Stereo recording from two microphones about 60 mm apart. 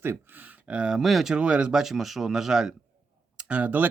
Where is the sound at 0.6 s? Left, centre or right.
Centre.